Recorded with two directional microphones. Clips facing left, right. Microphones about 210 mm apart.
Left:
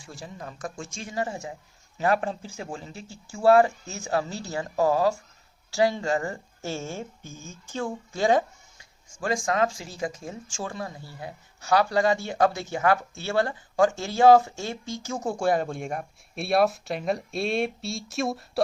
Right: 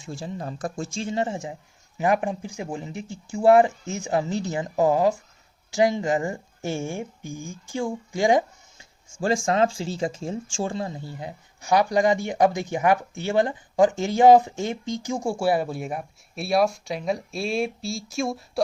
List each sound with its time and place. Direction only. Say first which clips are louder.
0.0 s speech: right 7 dB; 25° right (ahead or behind)
8.8 s speech: right 5 dB; 25° right (ahead or behind); by 18.6 s centre (ahead or behind)